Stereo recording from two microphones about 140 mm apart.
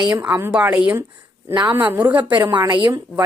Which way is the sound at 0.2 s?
15° right (ahead or behind).